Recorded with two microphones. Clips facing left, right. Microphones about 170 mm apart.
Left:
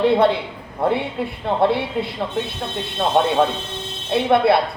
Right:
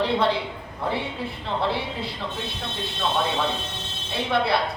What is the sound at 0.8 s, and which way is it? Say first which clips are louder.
Speech: left 7 dB; 60° left (ahead or behind).